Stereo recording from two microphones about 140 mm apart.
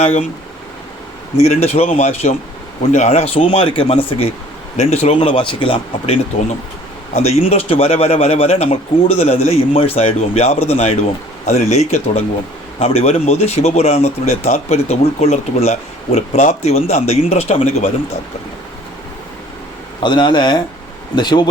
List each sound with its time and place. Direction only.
0.0 s a man's voice: 55° left (ahead or behind)
1.6 s a man's voice: 50° left (ahead or behind)
20.0 s speech: 35° left (ahead or behind)